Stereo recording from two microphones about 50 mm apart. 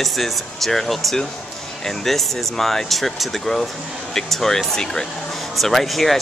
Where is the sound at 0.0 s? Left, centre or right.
Centre.